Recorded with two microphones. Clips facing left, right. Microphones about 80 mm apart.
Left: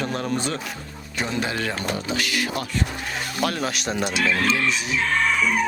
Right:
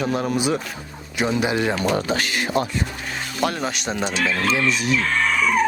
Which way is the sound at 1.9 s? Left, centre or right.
Right.